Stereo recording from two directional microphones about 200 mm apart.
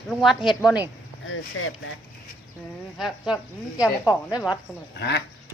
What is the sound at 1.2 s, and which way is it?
Speech, 90° left.